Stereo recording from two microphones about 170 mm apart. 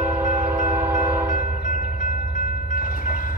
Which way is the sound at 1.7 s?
50° left (ahead or behind).